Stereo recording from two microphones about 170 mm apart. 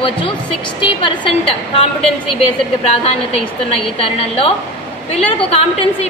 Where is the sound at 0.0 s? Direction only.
30° left (ahead or behind).